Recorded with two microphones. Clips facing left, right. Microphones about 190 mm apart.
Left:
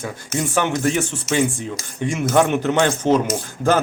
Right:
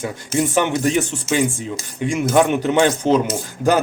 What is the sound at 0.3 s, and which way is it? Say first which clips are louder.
Speech: right 3 dB; 20° right (ahead or behind).